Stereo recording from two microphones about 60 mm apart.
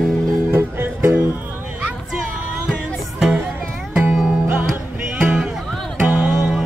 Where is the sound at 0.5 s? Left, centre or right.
Right.